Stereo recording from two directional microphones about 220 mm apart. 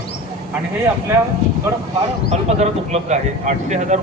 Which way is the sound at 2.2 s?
30° right (ahead or behind).